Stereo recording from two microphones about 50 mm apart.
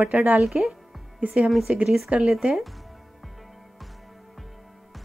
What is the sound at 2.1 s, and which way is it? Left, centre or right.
Speech, right.